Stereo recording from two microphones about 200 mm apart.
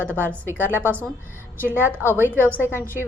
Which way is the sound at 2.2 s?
10° right (ahead or behind).